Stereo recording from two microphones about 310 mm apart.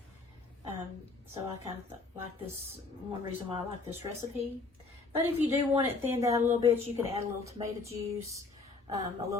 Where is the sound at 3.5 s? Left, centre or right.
Centre.